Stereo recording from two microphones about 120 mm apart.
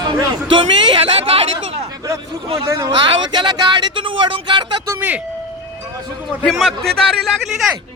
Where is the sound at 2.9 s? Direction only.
40° right (ahead or behind).